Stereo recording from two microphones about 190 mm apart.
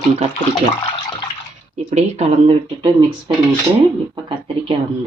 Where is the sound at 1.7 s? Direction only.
35° right (ahead or behind).